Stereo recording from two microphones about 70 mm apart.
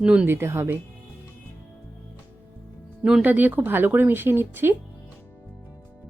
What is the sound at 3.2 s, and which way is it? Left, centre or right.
Speech, right.